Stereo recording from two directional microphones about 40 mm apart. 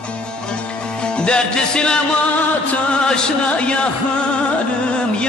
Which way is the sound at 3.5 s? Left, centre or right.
Left.